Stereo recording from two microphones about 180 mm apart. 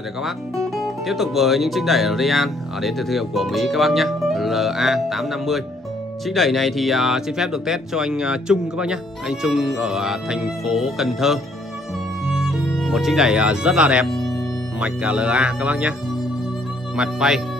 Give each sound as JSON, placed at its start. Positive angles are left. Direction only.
{"t": 0.7, "sound": "speech", "side_deg": 0}
{"t": 12.4, "sound": "speech", "side_deg": -5}
{"t": 16.9, "sound": "speech", "side_deg": -5}